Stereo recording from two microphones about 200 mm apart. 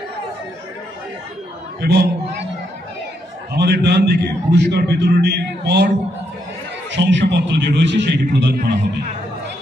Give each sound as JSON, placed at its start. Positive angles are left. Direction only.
{"t": 1.8, "sound": "a man's voice", "side_deg": -55}
{"t": 3.5, "sound": "a man's voice", "side_deg": -55}